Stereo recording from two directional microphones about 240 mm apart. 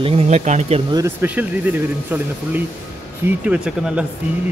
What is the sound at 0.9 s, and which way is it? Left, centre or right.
Speech, centre.